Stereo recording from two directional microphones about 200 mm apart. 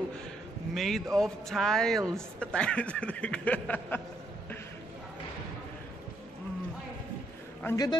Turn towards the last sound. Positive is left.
turn(degrees=20)  # may be behind; listen again after turning